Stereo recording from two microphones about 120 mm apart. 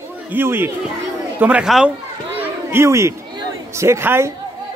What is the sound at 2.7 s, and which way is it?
Speech, 25° right (ahead or behind).